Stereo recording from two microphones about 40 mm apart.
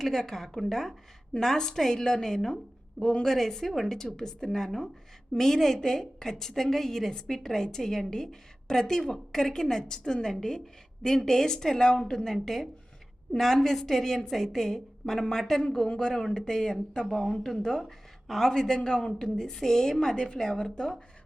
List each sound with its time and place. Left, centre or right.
0.0 s a woman's voice: centre
3.0 s a woman's voice: left
3.2 s a woman's voice: centre
17.8 s a woman's voice: centre; by 21.0 s left